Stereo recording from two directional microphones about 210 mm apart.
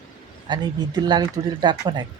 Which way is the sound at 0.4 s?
20° right (ahead or behind).